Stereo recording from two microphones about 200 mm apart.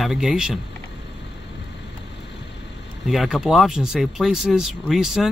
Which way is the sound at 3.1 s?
Centre (ahead or behind).